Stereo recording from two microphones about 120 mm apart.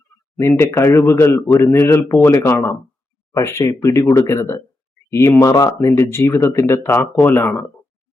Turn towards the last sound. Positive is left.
turn(degrees=20)  # may be behind; listen again after turning